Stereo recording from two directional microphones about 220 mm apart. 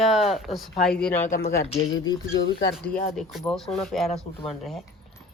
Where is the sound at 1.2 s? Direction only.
35° left (ahead or behind).